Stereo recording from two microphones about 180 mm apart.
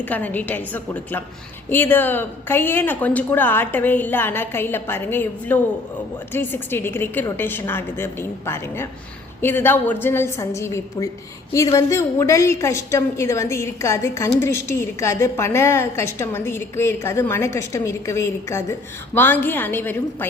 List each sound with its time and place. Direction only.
0.0 s a woman's voice: 10° left (ahead or behind)